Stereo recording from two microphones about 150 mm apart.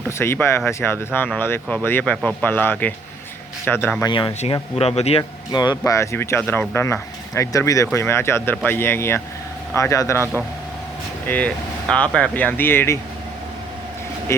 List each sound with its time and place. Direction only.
0.2 s speech: 15° left (ahead or behind)
4.0 s speech: 30° left (ahead or behind)
4.8 s a man's voice: 45° left (ahead or behind)
5.5 s speech: 25° left (ahead or behind)
11.3 s speech: 10° left (ahead or behind)
14.3 s speech: 15° left (ahead or behind)